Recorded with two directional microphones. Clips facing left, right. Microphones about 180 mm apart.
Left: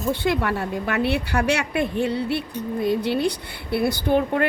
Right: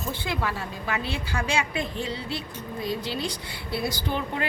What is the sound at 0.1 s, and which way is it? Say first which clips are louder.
A woman's voice: left 8 dB; 65° left (ahead or behind).